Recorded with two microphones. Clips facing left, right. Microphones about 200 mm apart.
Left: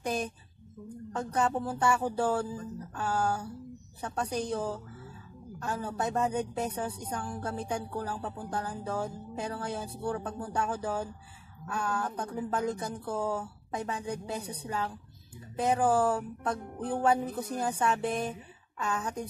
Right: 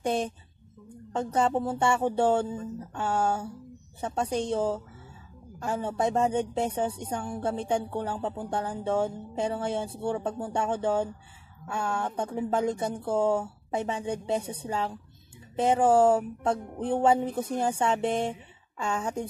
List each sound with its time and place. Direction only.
0.0 s speech: 25° right (ahead or behind)